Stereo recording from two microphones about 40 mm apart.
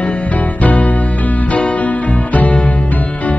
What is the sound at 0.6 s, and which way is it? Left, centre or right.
Music, left.